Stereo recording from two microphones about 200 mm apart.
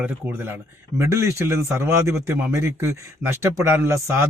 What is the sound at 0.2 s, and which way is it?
A man's voice, 10° right (ahead or behind).